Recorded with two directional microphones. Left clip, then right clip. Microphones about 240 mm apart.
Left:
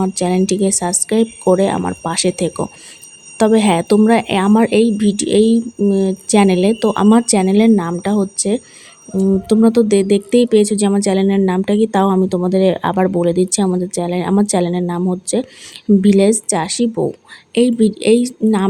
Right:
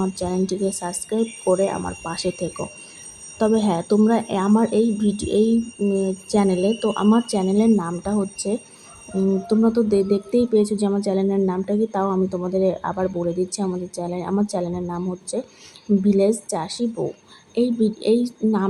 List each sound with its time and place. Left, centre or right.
0.0 s speech: left